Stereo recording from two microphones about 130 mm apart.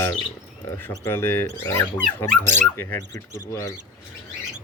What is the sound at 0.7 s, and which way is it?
Speech, 15° left (ahead or behind).